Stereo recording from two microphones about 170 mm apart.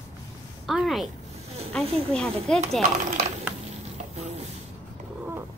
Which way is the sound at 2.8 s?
45° right (ahead or behind).